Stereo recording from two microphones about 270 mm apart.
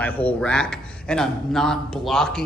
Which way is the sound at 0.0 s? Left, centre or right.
Centre.